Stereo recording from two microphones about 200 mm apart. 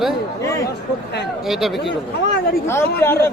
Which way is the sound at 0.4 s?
15° left (ahead or behind).